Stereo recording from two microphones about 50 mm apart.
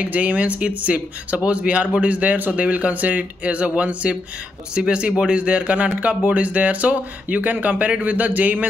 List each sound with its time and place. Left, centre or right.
0.0 s speech: right